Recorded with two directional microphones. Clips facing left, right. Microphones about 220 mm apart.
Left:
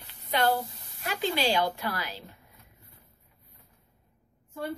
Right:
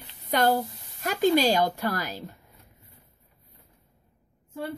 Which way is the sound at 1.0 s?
45° right (ahead or behind).